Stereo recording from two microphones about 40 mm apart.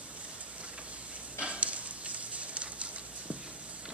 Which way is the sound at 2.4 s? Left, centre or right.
Right.